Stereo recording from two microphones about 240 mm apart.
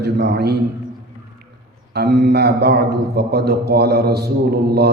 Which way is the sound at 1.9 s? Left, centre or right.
Right.